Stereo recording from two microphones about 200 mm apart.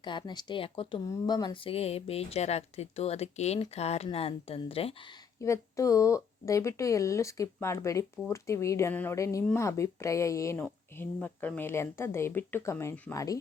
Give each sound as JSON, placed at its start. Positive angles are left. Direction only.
{"t": 0.0, "sound": "speech", "side_deg": 25}
{"t": 5.4, "sound": "speech", "side_deg": 15}